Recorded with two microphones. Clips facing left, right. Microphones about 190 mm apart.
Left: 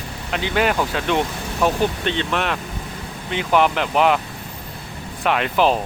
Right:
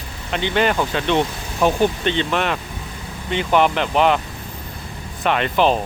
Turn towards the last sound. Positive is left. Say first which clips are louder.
# right 1 dB
turn(degrees=5)  # may be behind; listen again after turning